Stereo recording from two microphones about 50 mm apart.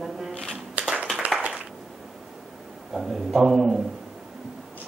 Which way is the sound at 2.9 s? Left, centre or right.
Centre.